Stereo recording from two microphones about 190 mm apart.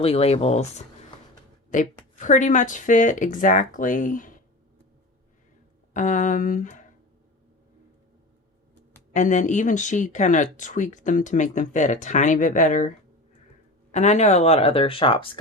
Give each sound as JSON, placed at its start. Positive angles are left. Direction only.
{"t": 0.0, "sound": "speech", "side_deg": 30}
{"t": 1.7, "sound": "speech", "side_deg": 40}
{"t": 5.9, "sound": "speech", "side_deg": 40}
{"t": 9.1, "sound": "speech", "side_deg": 40}
{"t": 13.9, "sound": "speech", "side_deg": 40}